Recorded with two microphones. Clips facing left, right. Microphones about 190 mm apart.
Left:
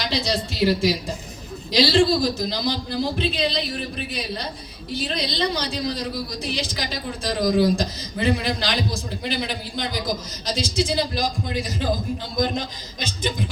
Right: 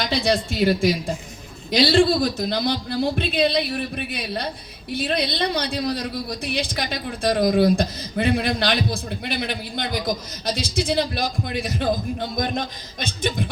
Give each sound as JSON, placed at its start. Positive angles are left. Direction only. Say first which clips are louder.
{"t": 0.0, "sound": "a man's voice", "louder": "right 3 dB", "side_deg": -55}